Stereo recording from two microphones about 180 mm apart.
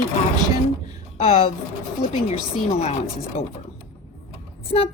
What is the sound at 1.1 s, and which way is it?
Speech, 35° left (ahead or behind).